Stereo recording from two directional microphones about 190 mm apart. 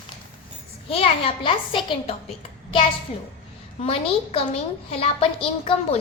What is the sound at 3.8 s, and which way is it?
A woman's voice, 30° left (ahead or behind).